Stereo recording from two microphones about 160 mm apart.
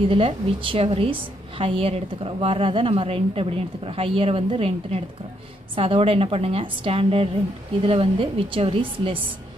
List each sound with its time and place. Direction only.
0.1 s a woman's voice: 35° right (ahead or behind)